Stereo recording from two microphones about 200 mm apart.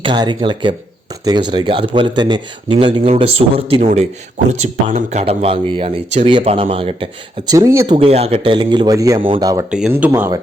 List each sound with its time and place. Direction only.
0.0 s speech: 25° right (ahead or behind)
7.9 s speech: 30° right (ahead or behind)
9.6 s speech: 5° right (ahead or behind)